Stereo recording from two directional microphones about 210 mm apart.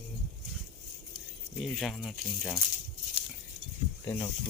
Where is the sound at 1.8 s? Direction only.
Centre (ahead or behind).